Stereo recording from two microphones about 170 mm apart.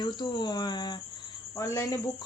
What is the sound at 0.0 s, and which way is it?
Speech, 25° left (ahead or behind).